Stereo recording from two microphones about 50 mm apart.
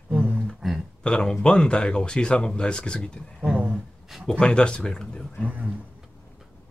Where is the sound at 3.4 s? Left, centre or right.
Right.